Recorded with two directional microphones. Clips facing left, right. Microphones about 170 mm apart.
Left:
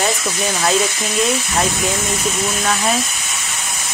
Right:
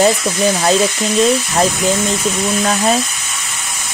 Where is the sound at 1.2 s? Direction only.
30° right (ahead or behind).